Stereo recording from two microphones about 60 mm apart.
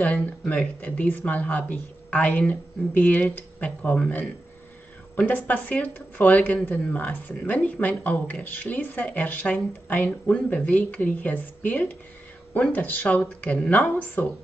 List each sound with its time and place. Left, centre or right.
0.0 s speech: left
5.1 s speech: left
13.8 s speech: left